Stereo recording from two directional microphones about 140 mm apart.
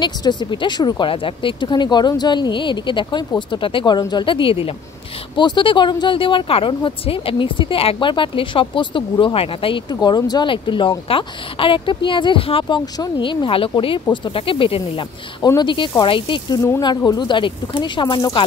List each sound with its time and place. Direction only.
0.0 s speech: 30° left (ahead or behind)